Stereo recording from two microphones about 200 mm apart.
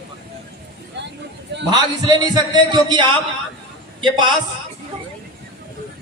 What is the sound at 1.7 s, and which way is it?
A man's voice, 20° right (ahead or behind).